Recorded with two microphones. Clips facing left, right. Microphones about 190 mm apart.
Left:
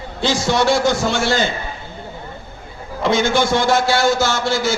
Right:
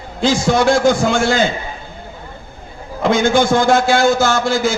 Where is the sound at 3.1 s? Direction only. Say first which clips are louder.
Right 4 dB; 50° right (ahead or behind).